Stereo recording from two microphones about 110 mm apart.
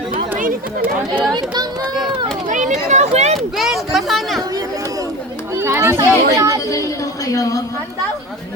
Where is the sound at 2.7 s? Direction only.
90° right.